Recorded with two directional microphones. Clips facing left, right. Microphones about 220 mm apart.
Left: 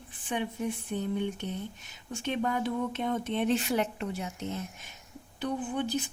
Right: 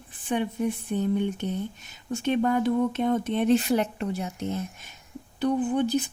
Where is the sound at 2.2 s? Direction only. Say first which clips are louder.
Right 7 dB; 45° right (ahead or behind).